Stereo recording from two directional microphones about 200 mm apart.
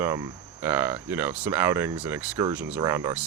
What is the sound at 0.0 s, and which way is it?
Speech, 15° right (ahead or behind).